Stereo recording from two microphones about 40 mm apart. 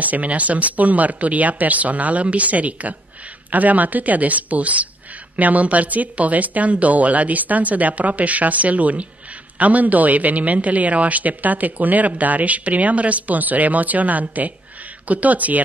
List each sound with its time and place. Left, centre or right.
0.0 s speech: right